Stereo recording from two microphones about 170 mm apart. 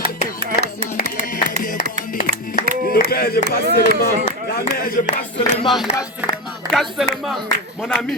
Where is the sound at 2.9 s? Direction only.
65° left (ahead or behind).